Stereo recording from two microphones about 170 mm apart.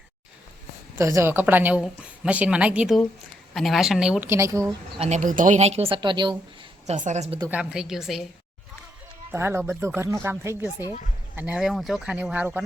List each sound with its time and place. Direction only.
0.9 s a woman's voice: 15° right (ahead or behind)
4.3 s a woman's voice: 15° right (ahead or behind)
4.9 s a woman's voice: 40° right (ahead or behind)
6.8 s a woman's voice: 45° right (ahead or behind)
7.5 s speech: 5° right (ahead or behind)
9.3 s a woman's voice: 15° right (ahead or behind)